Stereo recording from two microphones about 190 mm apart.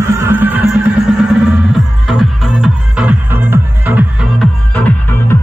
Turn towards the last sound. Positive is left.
turn(degrees=10)  # may be behind; listen again after turning